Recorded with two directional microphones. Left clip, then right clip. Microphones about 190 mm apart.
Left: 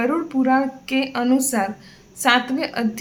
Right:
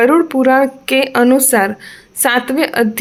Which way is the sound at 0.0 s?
40° right (ahead or behind).